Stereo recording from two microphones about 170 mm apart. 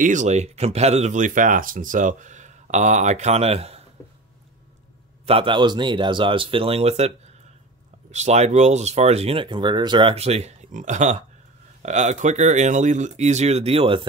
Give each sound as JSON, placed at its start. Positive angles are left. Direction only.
{"t": 0.0, "sound": "speech", "side_deg": -45}
{"t": 5.2, "sound": "speech", "side_deg": -35}